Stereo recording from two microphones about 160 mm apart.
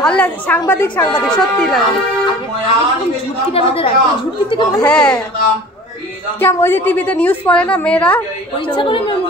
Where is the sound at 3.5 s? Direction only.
35° left (ahead or behind).